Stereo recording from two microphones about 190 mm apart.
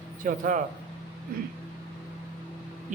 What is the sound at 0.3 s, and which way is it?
Speech, 45° right (ahead or behind).